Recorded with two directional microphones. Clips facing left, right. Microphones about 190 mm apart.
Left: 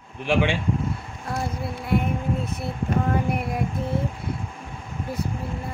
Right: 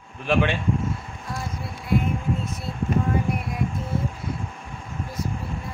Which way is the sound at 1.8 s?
60° left (ahead or behind).